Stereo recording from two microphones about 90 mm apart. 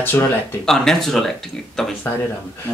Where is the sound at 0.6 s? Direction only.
5° left (ahead or behind).